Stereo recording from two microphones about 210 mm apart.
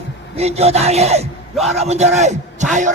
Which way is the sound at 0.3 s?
30° right (ahead or behind).